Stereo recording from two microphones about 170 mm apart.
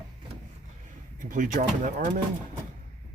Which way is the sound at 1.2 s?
50° right (ahead or behind).